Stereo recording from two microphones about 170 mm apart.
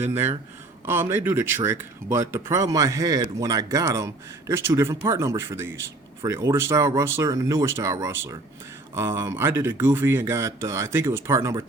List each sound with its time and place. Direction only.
0.0 s speech: 15° right (ahead or behind)